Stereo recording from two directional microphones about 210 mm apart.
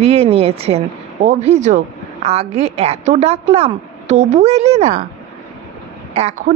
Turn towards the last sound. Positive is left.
turn(degrees=-30)  # may be behind; listen again after turning